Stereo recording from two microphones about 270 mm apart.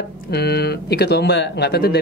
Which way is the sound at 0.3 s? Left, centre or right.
Left.